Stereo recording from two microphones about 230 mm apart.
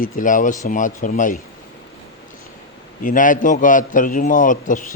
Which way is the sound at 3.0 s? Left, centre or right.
Left.